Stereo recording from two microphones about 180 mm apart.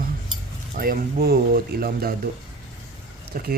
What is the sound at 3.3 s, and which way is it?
Speech, 50° right (ahead or behind).